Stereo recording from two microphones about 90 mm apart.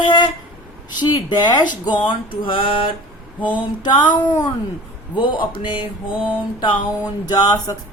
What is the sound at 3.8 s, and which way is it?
Speech, 55° left (ahead or behind).